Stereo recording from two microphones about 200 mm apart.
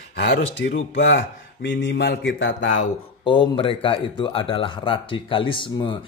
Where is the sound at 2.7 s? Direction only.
25° left (ahead or behind).